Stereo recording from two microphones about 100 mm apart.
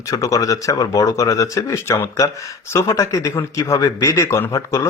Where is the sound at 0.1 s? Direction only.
30° left (ahead or behind).